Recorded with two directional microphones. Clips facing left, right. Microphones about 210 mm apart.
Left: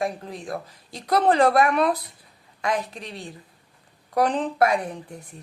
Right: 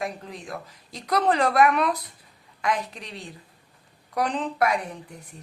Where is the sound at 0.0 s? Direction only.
35° left (ahead or behind).